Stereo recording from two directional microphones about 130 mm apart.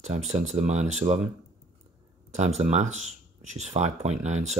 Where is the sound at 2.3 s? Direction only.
55° right (ahead or behind).